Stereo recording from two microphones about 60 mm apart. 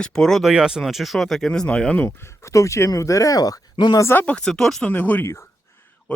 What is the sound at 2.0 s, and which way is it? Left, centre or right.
Speech, left.